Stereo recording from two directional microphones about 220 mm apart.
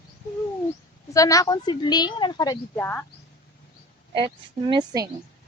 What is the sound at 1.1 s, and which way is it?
A woman's voice, 15° left (ahead or behind).